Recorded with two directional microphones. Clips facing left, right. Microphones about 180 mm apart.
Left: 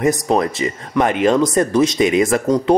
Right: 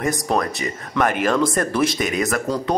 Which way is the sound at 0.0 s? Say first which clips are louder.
Left 5 dB; 20° left (ahead or behind).